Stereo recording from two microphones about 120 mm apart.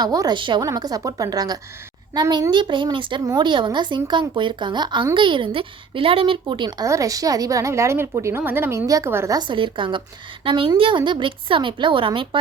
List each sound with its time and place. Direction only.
0.0 s speech: 30° right (ahead or behind)
0.3 s a woman's voice: 45° right (ahead or behind)
0.6 s speech: 30° right (ahead or behind)
2.5 s speech: 40° right (ahead or behind); by 9.3 s 20° right (ahead or behind)
9.3 s a woman's voice: 40° right (ahead or behind)